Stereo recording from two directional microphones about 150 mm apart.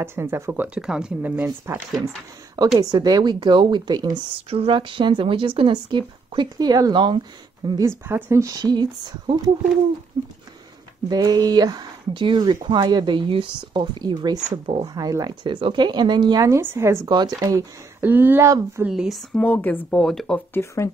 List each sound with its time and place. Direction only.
0.0 s speech: 15° right (ahead or behind)
2.8 s speech: 25° right (ahead or behind)
10.1 s speech: 35° right (ahead or behind)
11.1 s speech: 25° right (ahead or behind)
18.9 s speech: 5° right (ahead or behind)
20.5 s speech: 20° left (ahead or behind)